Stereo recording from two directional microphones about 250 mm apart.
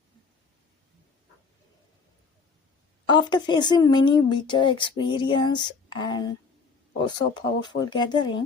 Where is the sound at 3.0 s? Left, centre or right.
Centre.